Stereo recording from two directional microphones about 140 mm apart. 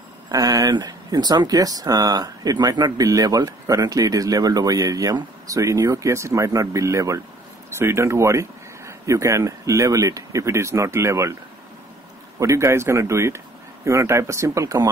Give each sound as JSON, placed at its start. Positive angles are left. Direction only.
{"t": 0.3, "sound": "speech", "side_deg": -25}
{"t": 12.4, "sound": "speech", "side_deg": -20}